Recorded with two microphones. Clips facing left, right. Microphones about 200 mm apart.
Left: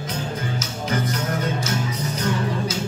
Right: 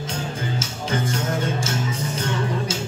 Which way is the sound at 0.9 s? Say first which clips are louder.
Even; 25° right (ahead or behind).